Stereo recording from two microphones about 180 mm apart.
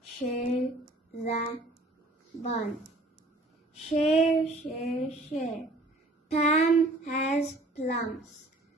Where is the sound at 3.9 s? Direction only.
35° left (ahead or behind).